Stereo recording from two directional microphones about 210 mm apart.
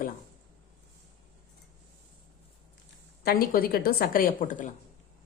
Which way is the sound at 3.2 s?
45° left (ahead or behind).